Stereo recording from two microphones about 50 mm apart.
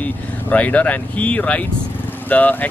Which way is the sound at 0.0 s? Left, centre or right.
Left.